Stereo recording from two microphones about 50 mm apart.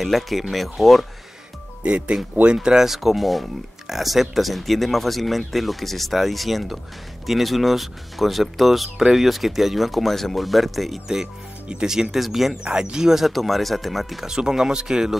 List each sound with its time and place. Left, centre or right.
0.0 s speech: centre
1.8 s speech: right; by 11.0 s centre
11.8 s speech: centre
12.6 s speech: centre
14.2 s speech: centre